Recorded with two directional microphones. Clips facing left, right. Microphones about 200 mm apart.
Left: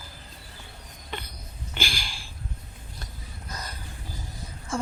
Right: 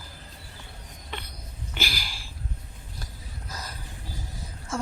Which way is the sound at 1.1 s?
Centre (ahead or behind).